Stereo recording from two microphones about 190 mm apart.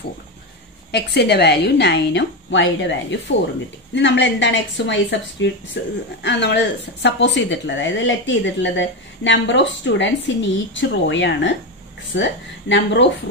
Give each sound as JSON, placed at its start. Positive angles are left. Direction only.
{"t": 0.9, "sound": "a woman's voice", "side_deg": 60}